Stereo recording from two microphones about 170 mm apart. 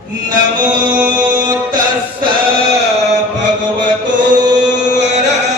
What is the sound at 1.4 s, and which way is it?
Chant, 25° right (ahead or behind).